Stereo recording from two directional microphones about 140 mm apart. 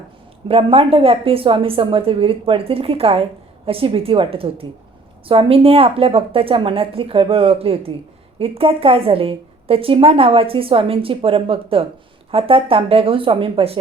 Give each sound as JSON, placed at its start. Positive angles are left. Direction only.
{"t": 0.4, "sound": "a woman's voice", "side_deg": -40}